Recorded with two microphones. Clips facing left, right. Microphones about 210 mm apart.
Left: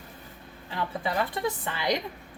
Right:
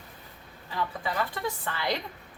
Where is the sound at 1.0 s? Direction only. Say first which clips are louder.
Left 5 dB; 20° left (ahead or behind).